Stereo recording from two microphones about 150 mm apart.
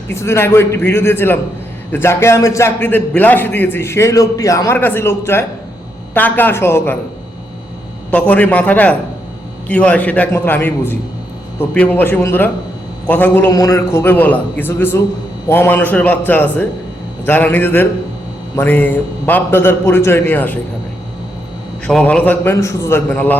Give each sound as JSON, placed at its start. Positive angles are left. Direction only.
{"t": 0.1, "sound": "a man's voice", "side_deg": 15}
{"t": 8.1, "sound": "a man's voice", "side_deg": 10}
{"t": 13.5, "sound": "a man's voice", "side_deg": 20}
{"t": 21.8, "sound": "a man's voice", "side_deg": 5}